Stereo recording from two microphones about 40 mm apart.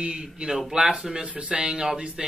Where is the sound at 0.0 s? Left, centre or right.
Right.